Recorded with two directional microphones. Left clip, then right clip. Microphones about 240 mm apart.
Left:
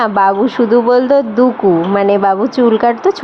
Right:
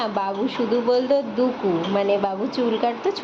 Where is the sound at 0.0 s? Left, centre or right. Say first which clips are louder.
Left 13 dB; left.